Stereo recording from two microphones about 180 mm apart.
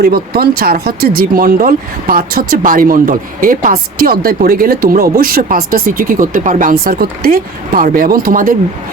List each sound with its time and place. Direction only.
0.0 s speech: 55° right (ahead or behind)